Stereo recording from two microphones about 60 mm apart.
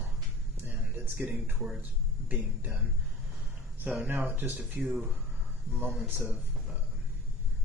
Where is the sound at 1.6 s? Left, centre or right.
Centre.